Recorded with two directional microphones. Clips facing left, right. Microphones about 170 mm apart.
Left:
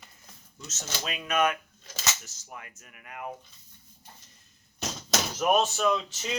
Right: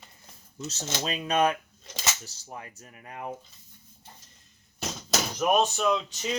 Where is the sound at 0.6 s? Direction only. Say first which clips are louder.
Right 5 dB; 30° right (ahead or behind).